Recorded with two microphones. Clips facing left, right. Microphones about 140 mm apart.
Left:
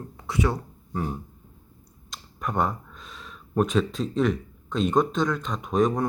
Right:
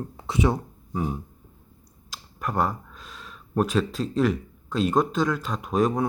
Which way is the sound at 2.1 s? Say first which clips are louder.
Even; centre (ahead or behind).